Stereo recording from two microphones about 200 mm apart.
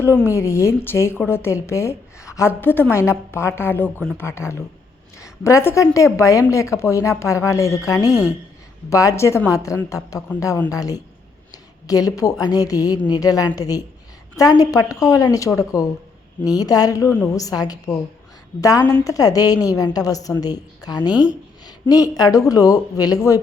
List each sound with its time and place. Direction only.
0.0 s a woman's voice: 10° left (ahead or behind)
21.1 s speech: 5° right (ahead or behind)
21.8 s a woman's voice: 15° left (ahead or behind)